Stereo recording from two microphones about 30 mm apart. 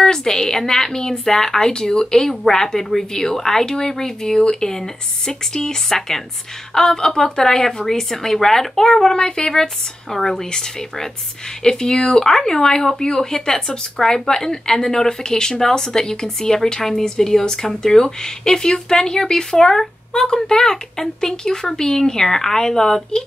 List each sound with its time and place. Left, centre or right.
0.0 s a woman's voice: centre
10.1 s speech: centre